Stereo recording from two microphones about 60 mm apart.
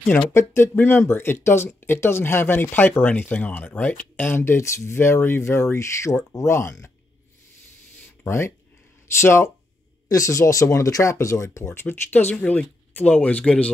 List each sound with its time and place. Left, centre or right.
0.3 s speech: left
4.4 s speech: left
8.2 s speech: left
10.0 s speech: left